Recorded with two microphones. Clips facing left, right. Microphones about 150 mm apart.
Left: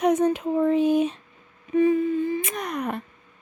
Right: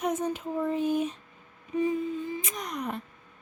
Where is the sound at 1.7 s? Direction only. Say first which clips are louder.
Left 8 dB; 65° left (ahead or behind).